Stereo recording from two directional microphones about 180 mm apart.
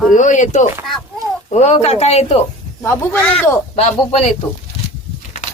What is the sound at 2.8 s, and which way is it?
Speech, 15° left (ahead or behind).